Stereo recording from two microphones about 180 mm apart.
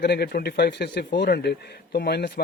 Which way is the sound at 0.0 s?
65° left (ahead or behind).